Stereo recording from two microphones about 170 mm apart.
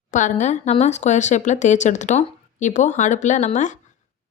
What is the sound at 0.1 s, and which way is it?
Speech, 45° left (ahead or behind).